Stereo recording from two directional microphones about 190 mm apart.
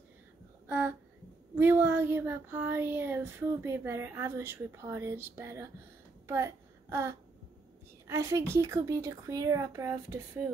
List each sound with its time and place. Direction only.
0.7 s speech: 10° right (ahead or behind)
6.2 s a sound: 15° right (ahead or behind)
8.1 s speech: 15° right (ahead or behind)